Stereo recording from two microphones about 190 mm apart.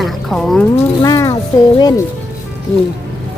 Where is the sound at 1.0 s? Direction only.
20° left (ahead or behind).